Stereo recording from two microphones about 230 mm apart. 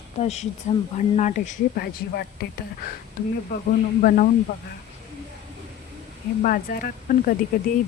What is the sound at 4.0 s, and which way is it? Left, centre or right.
Speech, left.